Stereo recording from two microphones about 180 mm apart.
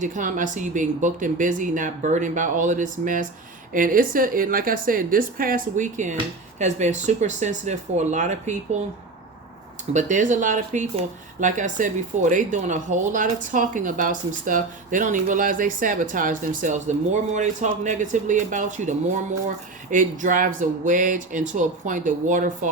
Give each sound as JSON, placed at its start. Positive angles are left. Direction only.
{"t": 0.0, "sound": "speech", "side_deg": -45}
{"t": 9.9, "sound": "speech", "side_deg": -40}